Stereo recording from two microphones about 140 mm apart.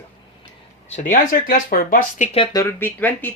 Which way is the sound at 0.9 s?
65° left (ahead or behind).